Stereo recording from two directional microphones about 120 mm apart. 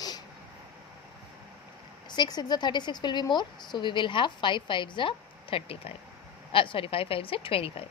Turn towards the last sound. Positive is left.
turn(degrees=50)  # may be behind; listen again after turning